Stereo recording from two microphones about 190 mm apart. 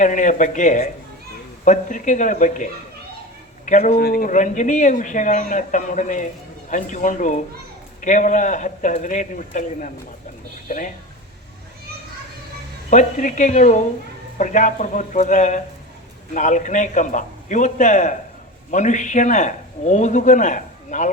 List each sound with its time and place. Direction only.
0.0 s speech: 40° left (ahead or behind)
3.7 s speech: 45° left (ahead or behind)
12.9 s speech: 40° left (ahead or behind)